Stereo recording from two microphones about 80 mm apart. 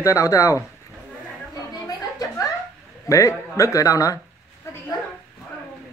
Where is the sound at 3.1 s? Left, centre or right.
Left.